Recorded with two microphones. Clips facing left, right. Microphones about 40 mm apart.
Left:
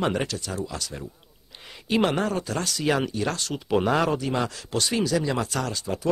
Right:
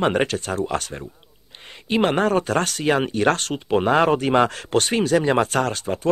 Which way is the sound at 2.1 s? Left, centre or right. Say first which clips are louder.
Right 7 dB; right.